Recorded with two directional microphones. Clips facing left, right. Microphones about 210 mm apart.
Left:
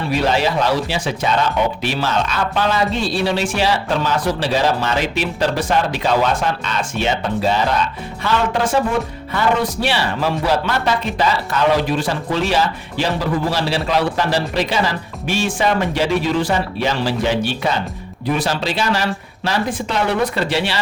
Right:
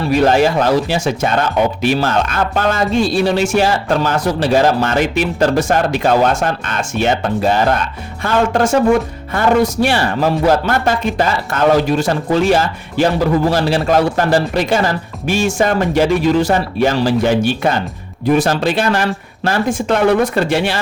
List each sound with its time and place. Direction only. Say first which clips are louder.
0.1 s speech: right 6 dB; 50° right (ahead or behind)